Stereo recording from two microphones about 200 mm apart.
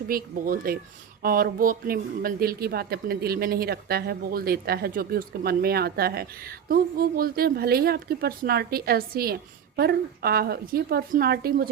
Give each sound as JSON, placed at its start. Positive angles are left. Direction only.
{"t": 0.1, "sound": "speech", "side_deg": -45}